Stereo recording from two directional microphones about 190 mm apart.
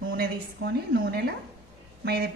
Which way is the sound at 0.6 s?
80° right.